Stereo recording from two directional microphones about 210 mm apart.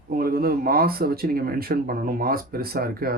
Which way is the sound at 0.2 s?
45° right (ahead or behind).